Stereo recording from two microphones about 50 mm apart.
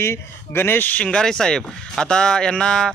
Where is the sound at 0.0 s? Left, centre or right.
Left.